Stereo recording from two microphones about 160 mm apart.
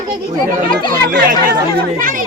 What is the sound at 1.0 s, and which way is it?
Speech, 70° right (ahead or behind).